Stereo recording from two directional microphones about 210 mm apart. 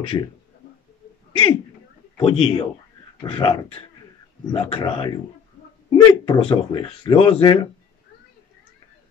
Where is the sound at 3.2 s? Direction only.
25° left (ahead or behind).